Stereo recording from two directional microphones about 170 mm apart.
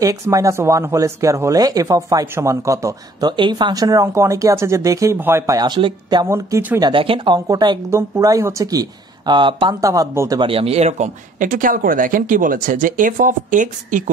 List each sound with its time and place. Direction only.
0.0 s speech: 20° right (ahead or behind)
6.2 s speech: 15° right (ahead or behind)
6.9 s speech: 30° right (ahead or behind)
9.8 s speech: 20° right (ahead or behind)
10.4 s speech: 35° right (ahead or behind); by 14.1 s 50° right (ahead or behind)